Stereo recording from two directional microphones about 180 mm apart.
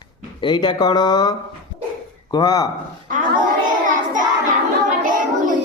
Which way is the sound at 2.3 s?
20° left (ahead or behind).